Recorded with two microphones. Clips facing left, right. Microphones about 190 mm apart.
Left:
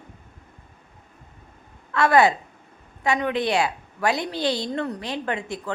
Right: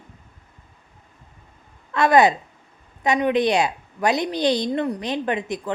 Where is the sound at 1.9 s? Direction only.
20° right (ahead or behind).